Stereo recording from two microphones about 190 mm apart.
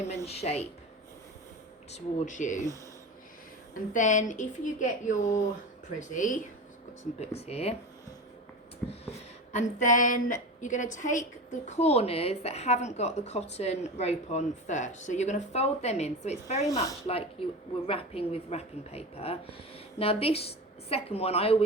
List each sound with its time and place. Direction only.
0.3 s a woman's voice: 35° left (ahead or behind)
1.9 s a woman's voice: 40° left (ahead or behind)
3.9 s a woman's voice: 40° left (ahead or behind)
8.8 s a sound: 5° left (ahead or behind)
9.5 s a woman's voice: 40° left (ahead or behind)
16.6 s speech: 15° left (ahead or behind)
17.1 s a woman's voice: 30° left (ahead or behind)